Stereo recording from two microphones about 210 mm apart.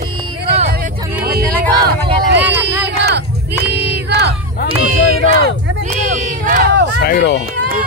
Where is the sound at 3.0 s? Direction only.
55° right (ahead or behind).